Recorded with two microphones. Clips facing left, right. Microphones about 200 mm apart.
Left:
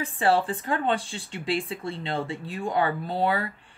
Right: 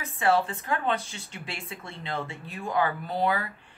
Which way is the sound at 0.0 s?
30° left (ahead or behind).